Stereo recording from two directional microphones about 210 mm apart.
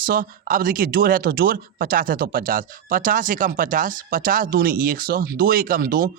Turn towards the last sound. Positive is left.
turn(degrees=-45)  # may be behind; listen again after turning